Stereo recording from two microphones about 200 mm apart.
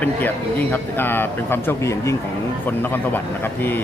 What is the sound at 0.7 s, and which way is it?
Speech, 10° left (ahead or behind).